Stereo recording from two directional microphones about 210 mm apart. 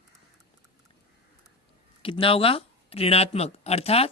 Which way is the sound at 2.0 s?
25° left (ahead or behind).